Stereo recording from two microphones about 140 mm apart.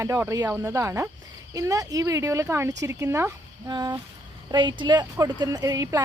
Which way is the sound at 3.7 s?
30° right (ahead or behind).